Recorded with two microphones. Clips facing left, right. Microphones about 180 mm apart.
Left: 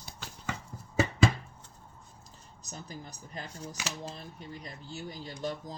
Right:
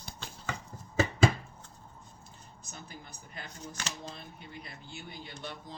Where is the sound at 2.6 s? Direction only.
40° left (ahead or behind).